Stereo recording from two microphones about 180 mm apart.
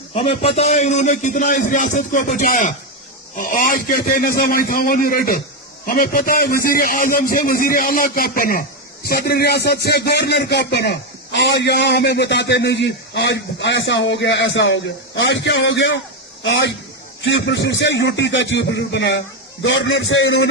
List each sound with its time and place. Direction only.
0.1 s a man's voice: 35° left (ahead or behind); by 19.2 s 80° left
19.6 s a man's voice: 90° left